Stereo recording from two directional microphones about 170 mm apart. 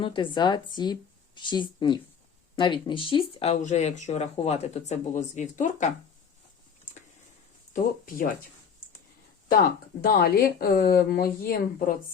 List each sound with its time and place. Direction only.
0.0 s a woman's voice: 30° left (ahead or behind); by 5.9 s 45° left (ahead or behind)
7.7 s speech: 55° left (ahead or behind)
9.5 s speech: 60° left (ahead or behind)